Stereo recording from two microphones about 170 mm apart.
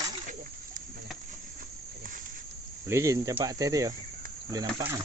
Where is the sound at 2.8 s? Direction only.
15° right (ahead or behind).